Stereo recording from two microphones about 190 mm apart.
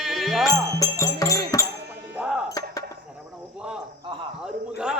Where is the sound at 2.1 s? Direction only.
5° right (ahead or behind).